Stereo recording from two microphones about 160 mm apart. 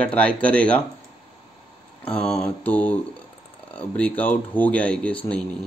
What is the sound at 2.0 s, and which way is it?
Mantra, 5° left (ahead or behind).